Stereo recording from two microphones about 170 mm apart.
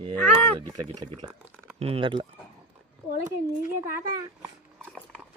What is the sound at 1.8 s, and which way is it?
Speech, 35° right (ahead or behind).